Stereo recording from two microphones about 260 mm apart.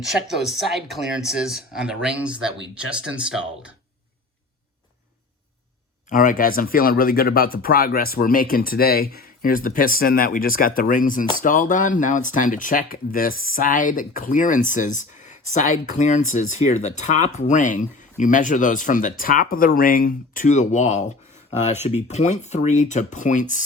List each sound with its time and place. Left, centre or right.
0.0 s speech: centre
6.1 s speech: left